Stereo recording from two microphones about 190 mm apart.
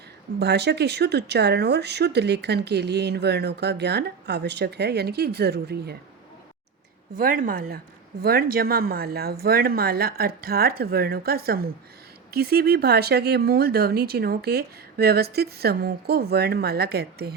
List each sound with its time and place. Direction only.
0.3 s speech: 60° right (ahead or behind)
7.2 s a woman's voice: 45° right (ahead or behind)